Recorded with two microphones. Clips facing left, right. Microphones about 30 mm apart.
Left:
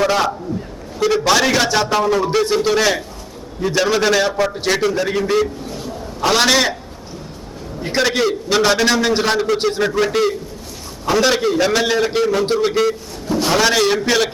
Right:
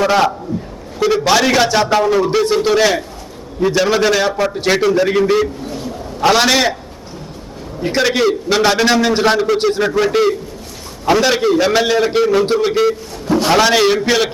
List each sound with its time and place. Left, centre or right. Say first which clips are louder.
0.0 s a man's voice: right 3 dB; centre
7.8 s a man's voice: right 2 dB; centre
13.3 s a man's voice: right 4 dB; right
13.6 s a man's voice: right 1 dB; centre